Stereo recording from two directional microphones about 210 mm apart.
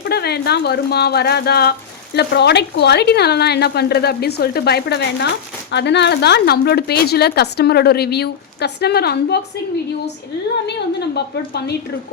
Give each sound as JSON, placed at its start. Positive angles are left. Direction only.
{"t": 0.0, "sound": "speech", "side_deg": 50}
{"t": 10.7, "sound": "speech", "side_deg": 50}